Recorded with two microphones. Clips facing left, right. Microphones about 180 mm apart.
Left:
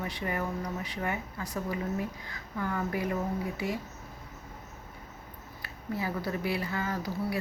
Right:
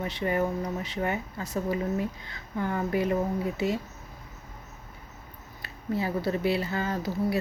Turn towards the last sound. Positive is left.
turn(degrees=-25)  # may be behind; listen again after turning